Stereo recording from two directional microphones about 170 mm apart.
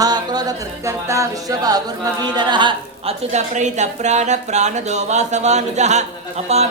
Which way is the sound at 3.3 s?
45° right (ahead or behind).